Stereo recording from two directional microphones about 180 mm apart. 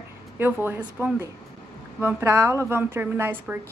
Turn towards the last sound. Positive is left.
turn(degrees=-10)  # may be behind; listen again after turning